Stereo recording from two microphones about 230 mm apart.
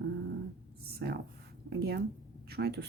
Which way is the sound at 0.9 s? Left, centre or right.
Right.